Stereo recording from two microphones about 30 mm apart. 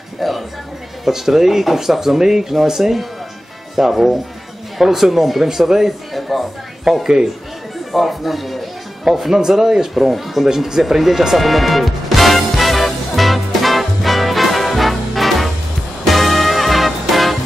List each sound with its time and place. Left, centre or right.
0.2 s speech: centre
6.1 s a sound: centre
6.8 s speech: centre
7.9 s speech: centre
10.0 s speech: centre
11.3 s music: centre